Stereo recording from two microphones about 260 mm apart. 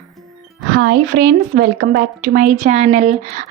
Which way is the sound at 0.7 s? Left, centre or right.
Right.